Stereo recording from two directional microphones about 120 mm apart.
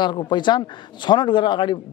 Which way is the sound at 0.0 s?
40° left (ahead or behind).